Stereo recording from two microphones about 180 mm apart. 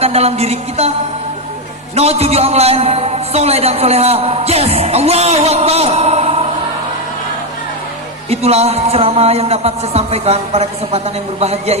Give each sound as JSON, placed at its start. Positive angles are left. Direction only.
{"t": 0.0, "sound": "a man's voice", "side_deg": -35}
{"t": 2.0, "sound": "a man's voice", "side_deg": -35}
{"t": 8.3, "sound": "a man's voice", "side_deg": -35}